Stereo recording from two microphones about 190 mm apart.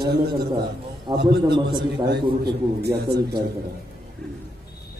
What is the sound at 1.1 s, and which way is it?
A man's voice, 25° right (ahead or behind).